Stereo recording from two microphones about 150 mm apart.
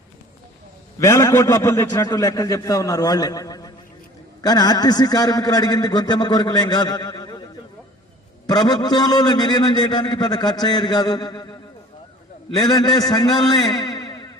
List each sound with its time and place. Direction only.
0.9 s a man's voice: 20° left (ahead or behind)
8.4 s a man's voice: 25° left (ahead or behind)
12.5 s a man's voice: 25° left (ahead or behind)